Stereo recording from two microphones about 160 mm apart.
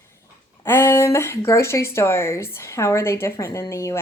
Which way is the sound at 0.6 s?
15° left (ahead or behind).